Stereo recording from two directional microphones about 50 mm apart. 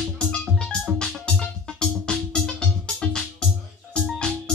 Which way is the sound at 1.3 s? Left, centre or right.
Centre.